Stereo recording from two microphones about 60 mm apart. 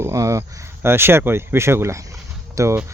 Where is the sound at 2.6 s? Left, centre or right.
Right.